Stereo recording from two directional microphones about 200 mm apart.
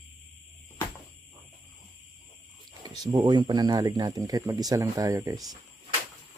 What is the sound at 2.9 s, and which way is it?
Speech, 20° right (ahead or behind).